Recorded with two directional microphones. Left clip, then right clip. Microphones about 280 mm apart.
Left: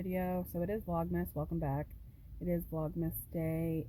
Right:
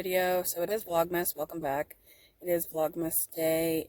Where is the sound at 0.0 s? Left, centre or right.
Right.